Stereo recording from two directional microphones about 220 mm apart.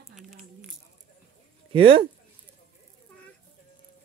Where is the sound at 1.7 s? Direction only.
25° right (ahead or behind).